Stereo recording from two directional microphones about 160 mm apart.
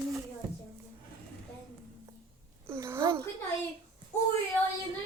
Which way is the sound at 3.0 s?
30° right (ahead or behind).